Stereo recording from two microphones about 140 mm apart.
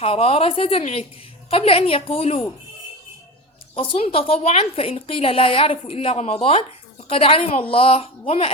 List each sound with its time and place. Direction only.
0.0 s a woman's voice: 45° left (ahead or behind)
3.8 s a woman's voice: 40° left (ahead or behind)